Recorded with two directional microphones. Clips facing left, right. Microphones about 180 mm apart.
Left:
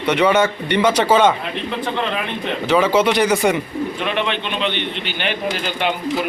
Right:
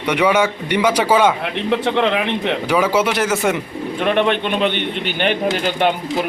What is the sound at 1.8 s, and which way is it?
Speech, 75° right (ahead or behind).